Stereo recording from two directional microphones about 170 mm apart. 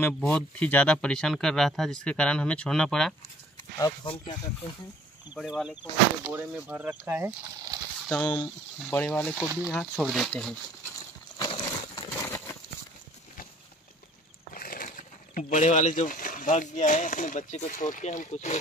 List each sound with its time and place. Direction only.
0.0 s speech: 10° left (ahead or behind)
3.7 s speech: 25° left (ahead or behind)
5.3 s speech: 5° right (ahead or behind)
8.1 s speech: 10° left (ahead or behind)
11.3 s a sound: 25° left (ahead or behind)
14.5 s speech: 55° left (ahead or behind)